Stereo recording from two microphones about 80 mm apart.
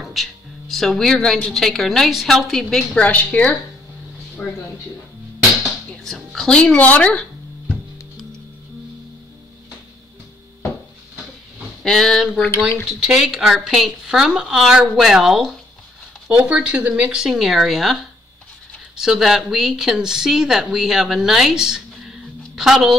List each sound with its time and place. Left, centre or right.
0.0 s a woman's voice: centre; by 4.5 s left
6.0 s speech: centre
11.8 s speech: centre
12.4 s speech: left
13.0 s speech: centre
16.3 s speech: centre
18.9 s speech: centre